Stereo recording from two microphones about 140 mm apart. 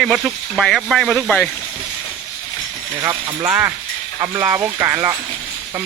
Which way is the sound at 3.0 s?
25° right (ahead or behind).